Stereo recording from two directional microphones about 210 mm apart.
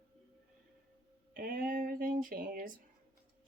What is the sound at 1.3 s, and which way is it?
Speech, 45° right (ahead or behind).